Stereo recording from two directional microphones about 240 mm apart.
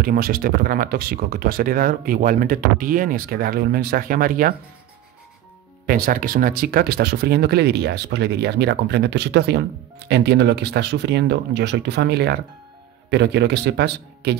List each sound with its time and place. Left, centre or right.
0.0 s speech: right
5.9 s speech: right